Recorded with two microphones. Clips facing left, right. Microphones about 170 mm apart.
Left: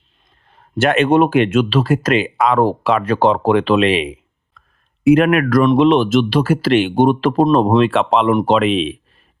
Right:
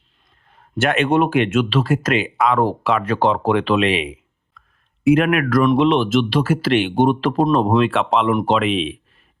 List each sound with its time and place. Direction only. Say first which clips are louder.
0.5 s speech: left 4 dB; 30° left (ahead or behind)